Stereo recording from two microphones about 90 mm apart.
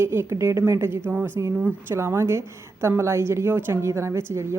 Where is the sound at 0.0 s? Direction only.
30° right (ahead or behind).